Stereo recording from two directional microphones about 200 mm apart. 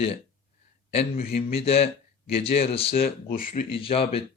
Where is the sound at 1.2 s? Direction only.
50° left (ahead or behind).